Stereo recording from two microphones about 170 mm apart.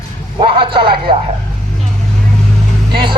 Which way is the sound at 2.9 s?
30° right (ahead or behind).